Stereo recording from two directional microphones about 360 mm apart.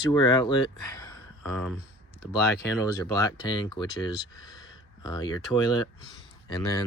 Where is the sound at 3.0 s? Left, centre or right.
Centre.